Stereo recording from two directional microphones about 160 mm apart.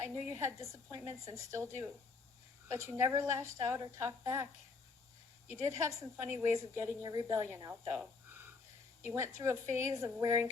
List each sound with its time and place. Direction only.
0.0 s a woman's voice: 20° right (ahead or behind)
5.5 s a woman's voice: 20° right (ahead or behind)